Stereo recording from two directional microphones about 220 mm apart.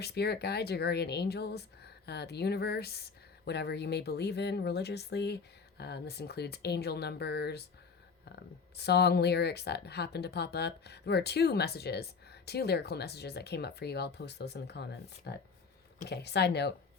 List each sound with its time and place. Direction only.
0.0 s speech: 50° left (ahead or behind)
8.8 s speech: 50° left (ahead or behind)